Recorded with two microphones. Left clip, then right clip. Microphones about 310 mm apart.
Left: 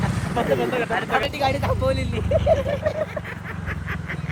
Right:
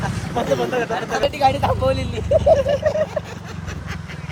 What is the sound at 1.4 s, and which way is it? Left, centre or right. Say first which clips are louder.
Speech: right 5 dB; centre.